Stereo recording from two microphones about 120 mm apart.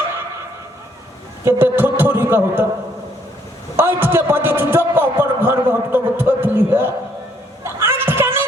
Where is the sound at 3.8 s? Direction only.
20° right (ahead or behind).